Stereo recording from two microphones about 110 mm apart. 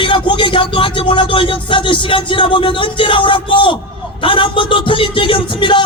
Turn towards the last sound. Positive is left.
turn(degrees=50)  # may be behind; listen again after turning